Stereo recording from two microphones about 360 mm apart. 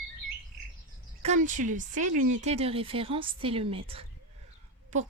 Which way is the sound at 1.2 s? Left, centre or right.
Right.